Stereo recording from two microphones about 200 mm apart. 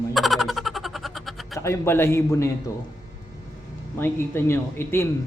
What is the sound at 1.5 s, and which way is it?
Speech, 15° left (ahead or behind).